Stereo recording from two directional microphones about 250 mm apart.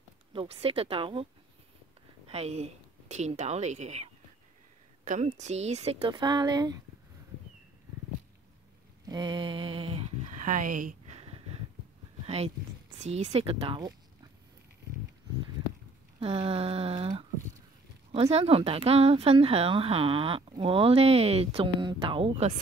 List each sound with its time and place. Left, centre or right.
0.3 s speech: right
2.2 s a woman's voice: right
9.0 s a sound: centre
13.0 s speech: right
16.2 s speech: right